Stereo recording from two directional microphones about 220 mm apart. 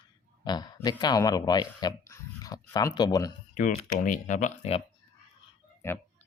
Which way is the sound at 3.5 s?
35° left (ahead or behind).